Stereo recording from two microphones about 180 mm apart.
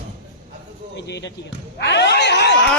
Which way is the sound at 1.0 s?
70° left (ahead or behind).